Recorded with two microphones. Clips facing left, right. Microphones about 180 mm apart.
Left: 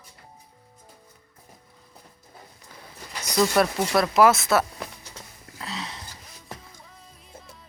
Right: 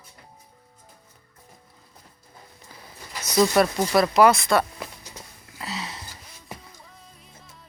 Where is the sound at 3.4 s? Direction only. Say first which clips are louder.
Right 2 dB; 5° right (ahead or behind).